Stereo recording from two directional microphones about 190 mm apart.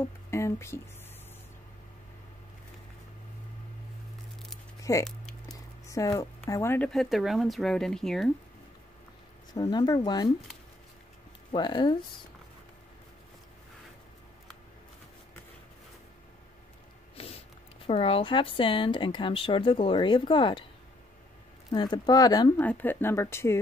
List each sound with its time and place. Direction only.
0.0 s speech: 15° left (ahead or behind)
4.9 s speech: 15° left (ahead or behind)
5.5 s a sound: 15° left (ahead or behind)
6.9 s speech: centre (ahead or behind)
9.5 s speech: 20° left (ahead or behind)
11.5 s speech: 25° left (ahead or behind)
17.2 s a sound: 30° left (ahead or behind)
17.8 s speech: 30° left (ahead or behind)
21.6 s speech: 20° left (ahead or behind)
22.6 s speech: 10° left (ahead or behind)